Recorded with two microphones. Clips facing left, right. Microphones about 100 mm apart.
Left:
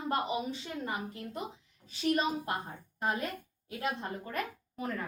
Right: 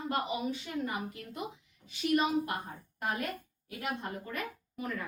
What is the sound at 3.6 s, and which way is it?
A woman's voice, 25° left (ahead or behind).